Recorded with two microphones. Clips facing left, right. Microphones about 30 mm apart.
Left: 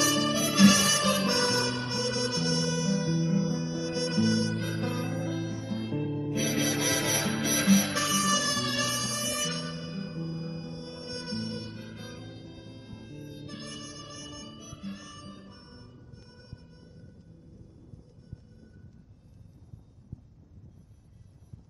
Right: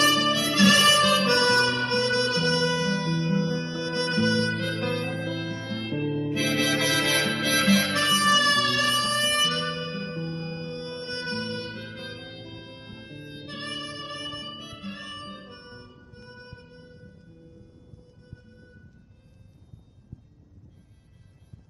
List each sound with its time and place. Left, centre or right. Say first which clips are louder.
0.0 s music: right 5 dB; centre
1.3 s harmonica: right 6 dB; right
1.7 s music: right 7 dB; right
3.3 s music: right 3 dB; right
4.5 s music: right 5 dB; right
6.6 s music: right 5 dB; centre
7.0 s music: right 5 dB; right
8.3 s music: right 8 dB; right
8.9 s music: right 9 dB; right
18.2 s music: right 2 dB; right